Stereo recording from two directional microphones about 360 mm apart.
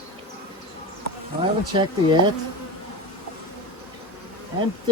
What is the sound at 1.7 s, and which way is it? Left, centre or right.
Speech, centre.